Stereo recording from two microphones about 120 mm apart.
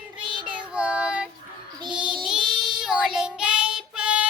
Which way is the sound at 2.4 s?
40° right (ahead or behind).